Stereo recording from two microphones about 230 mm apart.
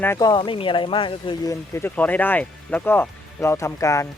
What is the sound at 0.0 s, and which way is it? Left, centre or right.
Speech, centre.